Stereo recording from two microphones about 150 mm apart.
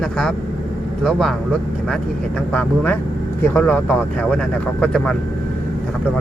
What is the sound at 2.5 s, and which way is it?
Speech, 10° left (ahead or behind).